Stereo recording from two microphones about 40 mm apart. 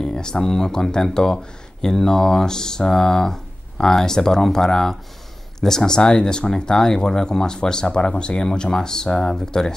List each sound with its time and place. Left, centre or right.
0.0 s speech: centre